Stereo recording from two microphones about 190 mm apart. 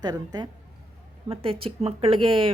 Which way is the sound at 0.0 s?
20° right (ahead or behind).